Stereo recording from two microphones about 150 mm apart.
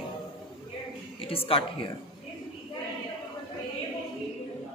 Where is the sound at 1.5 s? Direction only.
35° left (ahead or behind).